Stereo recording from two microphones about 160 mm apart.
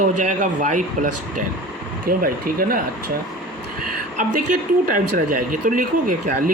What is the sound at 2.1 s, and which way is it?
Speech, 65° right (ahead or behind).